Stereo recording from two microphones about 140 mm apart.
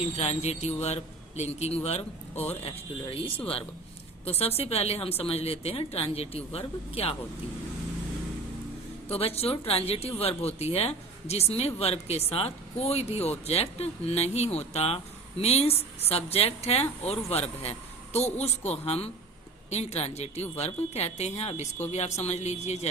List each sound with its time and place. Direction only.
0.2 s speech: 50° left (ahead or behind)
9.0 s speech: 45° left (ahead or behind)